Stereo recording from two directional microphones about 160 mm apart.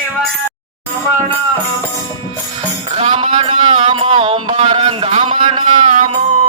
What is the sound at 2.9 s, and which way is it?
Mantra, 40° right (ahead or behind).